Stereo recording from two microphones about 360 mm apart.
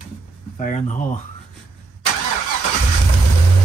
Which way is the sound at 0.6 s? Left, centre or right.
Left.